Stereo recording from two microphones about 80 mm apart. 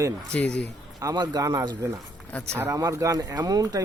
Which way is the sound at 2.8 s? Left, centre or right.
Right.